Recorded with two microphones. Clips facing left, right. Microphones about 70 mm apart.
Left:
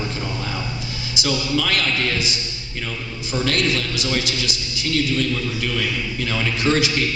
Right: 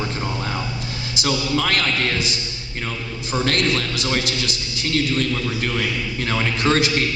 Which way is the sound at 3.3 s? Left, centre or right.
Right.